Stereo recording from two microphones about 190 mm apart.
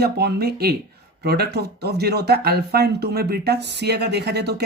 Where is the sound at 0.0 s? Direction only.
55° right (ahead or behind).